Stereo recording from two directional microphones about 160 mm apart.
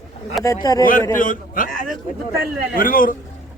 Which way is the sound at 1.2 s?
60° left (ahead or behind).